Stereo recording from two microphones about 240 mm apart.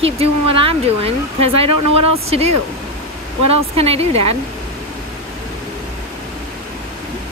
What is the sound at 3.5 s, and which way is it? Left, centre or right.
Speech, right.